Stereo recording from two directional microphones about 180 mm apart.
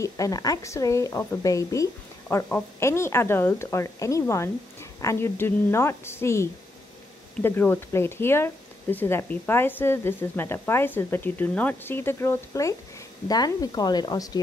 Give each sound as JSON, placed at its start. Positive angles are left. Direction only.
{"t": 0.0, "sound": "a woman's voice", "side_deg": 20}